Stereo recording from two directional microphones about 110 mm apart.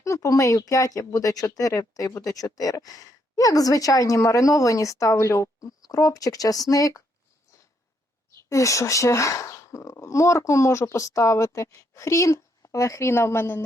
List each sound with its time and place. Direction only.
0.0 s speech: 30° left (ahead or behind)
8.4 s speech: 30° left (ahead or behind)